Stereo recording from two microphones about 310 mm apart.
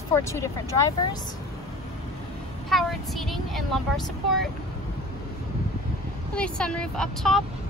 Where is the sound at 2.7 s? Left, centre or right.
Centre.